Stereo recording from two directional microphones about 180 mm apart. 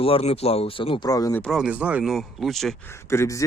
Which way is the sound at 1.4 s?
Centre (ahead or behind).